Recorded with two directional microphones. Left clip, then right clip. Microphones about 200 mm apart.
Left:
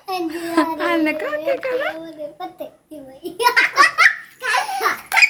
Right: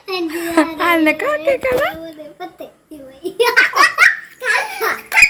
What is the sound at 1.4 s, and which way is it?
Speech, centre (ahead or behind).